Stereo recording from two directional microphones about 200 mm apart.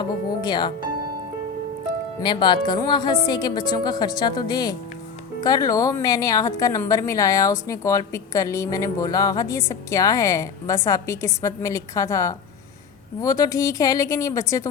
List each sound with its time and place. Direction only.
0.4 s a woman's voice: 20° left (ahead or behind)
2.2 s a woman's voice: 25° left (ahead or behind)